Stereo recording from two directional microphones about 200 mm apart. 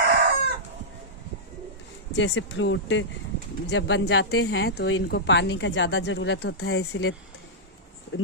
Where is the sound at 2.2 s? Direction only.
70° left (ahead or behind).